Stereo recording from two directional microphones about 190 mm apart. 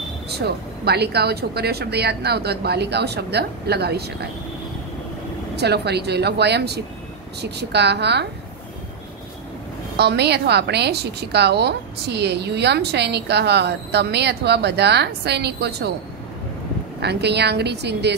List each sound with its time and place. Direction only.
0.3 s a woman's voice: 60° right (ahead or behind)
5.6 s a woman's voice: 60° right (ahead or behind)
9.9 s a woman's voice: 60° right (ahead or behind)
17.0 s a woman's voice: 60° right (ahead or behind)